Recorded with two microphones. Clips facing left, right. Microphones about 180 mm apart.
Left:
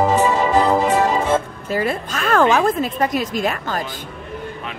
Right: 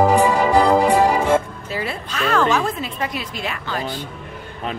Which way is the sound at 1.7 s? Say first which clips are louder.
Left 6 dB; 45° left (ahead or behind).